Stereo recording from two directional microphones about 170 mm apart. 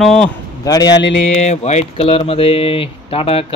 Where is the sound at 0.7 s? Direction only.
20° left (ahead or behind).